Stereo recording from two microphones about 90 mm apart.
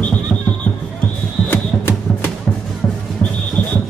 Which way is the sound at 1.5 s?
25° left (ahead or behind).